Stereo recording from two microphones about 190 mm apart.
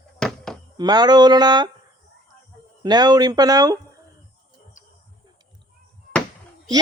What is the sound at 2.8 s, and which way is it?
Speech, 20° right (ahead or behind).